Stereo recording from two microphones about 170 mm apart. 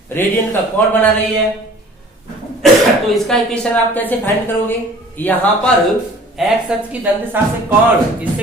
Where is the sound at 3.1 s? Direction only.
5° left (ahead or behind).